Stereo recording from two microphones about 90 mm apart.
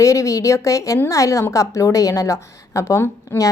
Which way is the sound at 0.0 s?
35° left (ahead or behind).